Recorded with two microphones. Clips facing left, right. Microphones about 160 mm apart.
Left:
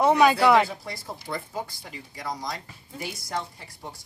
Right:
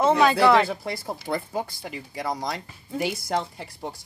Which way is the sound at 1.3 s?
35° right (ahead or behind).